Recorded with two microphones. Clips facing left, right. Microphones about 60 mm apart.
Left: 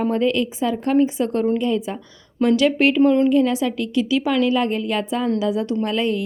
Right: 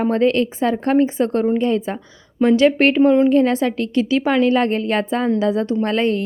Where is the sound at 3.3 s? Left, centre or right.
Right.